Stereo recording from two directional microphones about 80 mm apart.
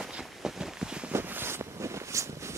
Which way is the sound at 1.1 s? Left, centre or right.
Right.